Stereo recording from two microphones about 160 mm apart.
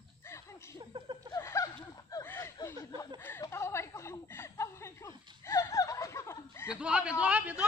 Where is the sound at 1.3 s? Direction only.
20° left (ahead or behind).